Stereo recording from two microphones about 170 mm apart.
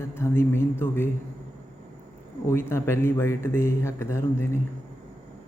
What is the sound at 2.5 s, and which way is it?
Speech, 15° left (ahead or behind).